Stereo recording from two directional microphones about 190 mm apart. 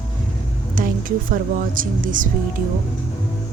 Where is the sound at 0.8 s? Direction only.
45° right (ahead or behind).